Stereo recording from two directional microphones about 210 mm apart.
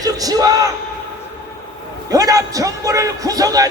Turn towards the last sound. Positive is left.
turn(degrees=-15)  # may be behind; listen again after turning